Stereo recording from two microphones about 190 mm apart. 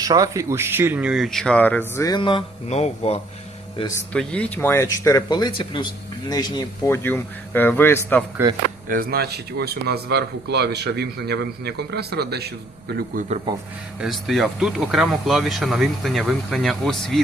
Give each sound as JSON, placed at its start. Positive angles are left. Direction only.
{"t": 0.0, "sound": "speech", "side_deg": -20}
{"t": 3.8, "sound": "speech", "side_deg": 20}
{"t": 4.1, "sound": "speech", "side_deg": 5}
{"t": 8.9, "sound": "a man's voice", "side_deg": -50}
{"t": 14.0, "sound": "speech", "side_deg": 0}